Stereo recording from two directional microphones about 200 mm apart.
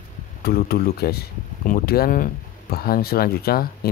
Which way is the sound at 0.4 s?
50° left (ahead or behind).